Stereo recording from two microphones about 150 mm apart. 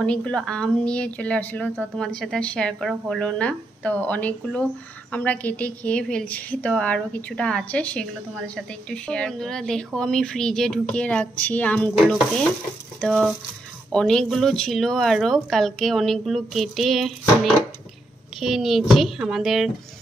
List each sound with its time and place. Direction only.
0.0 s a woman's voice: 5° left (ahead or behind)